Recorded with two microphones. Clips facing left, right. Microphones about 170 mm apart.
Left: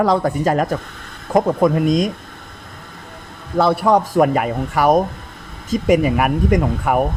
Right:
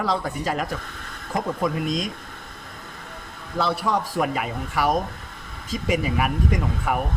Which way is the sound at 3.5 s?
55° left (ahead or behind).